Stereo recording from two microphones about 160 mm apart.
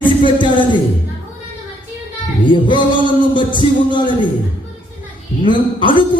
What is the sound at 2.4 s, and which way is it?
Music, 30° left (ahead or behind).